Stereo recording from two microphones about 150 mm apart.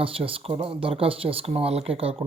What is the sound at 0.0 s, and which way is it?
Speech, 35° right (ahead or behind).